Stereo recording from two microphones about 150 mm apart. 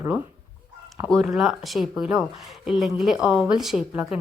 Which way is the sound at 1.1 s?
Centre (ahead or behind).